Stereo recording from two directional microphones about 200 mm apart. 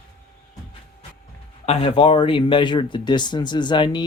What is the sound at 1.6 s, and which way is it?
Speech, 30° left (ahead or behind).